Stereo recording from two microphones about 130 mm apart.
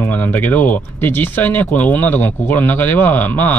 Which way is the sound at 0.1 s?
15° left (ahead or behind).